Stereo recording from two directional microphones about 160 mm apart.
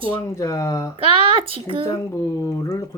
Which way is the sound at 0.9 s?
35° right (ahead or behind).